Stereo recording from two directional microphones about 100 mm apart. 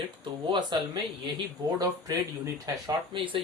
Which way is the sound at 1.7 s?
35° right (ahead or behind).